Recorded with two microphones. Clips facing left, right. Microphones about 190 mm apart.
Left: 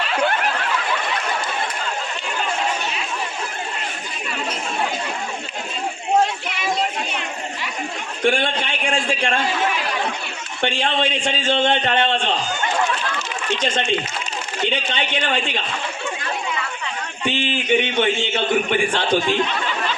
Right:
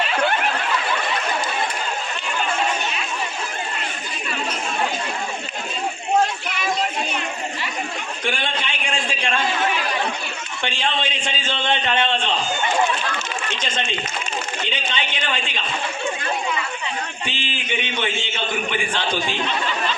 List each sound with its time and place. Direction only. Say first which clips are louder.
8.2 s a sound: left 7 dB; 50° left (ahead or behind)
10.6 s speech: left 4 dB; 55° left (ahead or behind)
14.7 s a man's voice: left 4 dB; 55° left (ahead or behind)
17.2 s a man's voice: left 8 dB; 50° left (ahead or behind)